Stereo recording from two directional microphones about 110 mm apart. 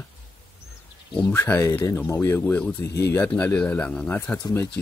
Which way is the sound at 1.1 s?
15° left (ahead or behind).